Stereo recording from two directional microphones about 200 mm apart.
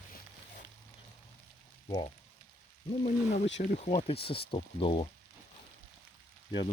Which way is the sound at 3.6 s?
40° left (ahead or behind).